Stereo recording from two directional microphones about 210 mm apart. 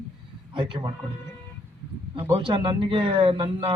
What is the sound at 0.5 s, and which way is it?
Speech, 20° right (ahead or behind).